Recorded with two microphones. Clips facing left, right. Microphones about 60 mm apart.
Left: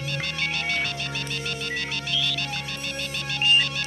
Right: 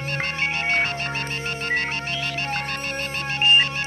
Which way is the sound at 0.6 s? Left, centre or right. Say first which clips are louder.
Right 7 dB; right.